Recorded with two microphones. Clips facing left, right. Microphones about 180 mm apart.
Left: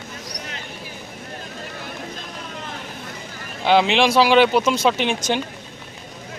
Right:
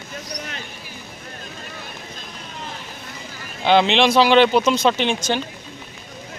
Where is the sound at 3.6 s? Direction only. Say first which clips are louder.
Right 1 dB; 5° left (ahead or behind).